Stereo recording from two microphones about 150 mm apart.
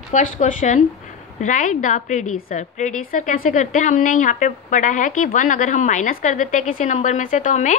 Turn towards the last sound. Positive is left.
turn(degrees=55)  # may be behind; listen again after turning